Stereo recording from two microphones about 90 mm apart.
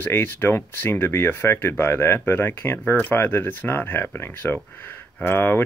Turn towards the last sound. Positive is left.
turn(degrees=25)  # may be behind; listen again after turning